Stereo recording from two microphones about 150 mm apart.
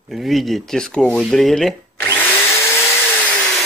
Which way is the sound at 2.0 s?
15° left (ahead or behind).